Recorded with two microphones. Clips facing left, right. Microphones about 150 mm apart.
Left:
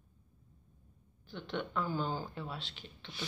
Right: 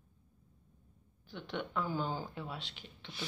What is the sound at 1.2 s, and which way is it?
Speech, 10° right (ahead or behind).